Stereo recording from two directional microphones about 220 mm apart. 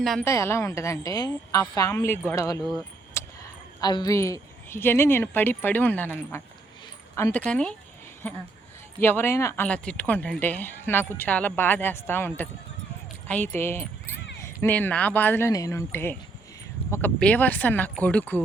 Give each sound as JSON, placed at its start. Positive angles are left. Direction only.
{"t": 0.0, "sound": "a woman's voice", "side_deg": 0}
{"t": 0.3, "sound": "speech", "side_deg": 10}
{"t": 3.2, "sound": "a sound", "side_deg": 10}
{"t": 3.8, "sound": "speech", "side_deg": 20}
{"t": 9.0, "sound": "speech", "side_deg": 10}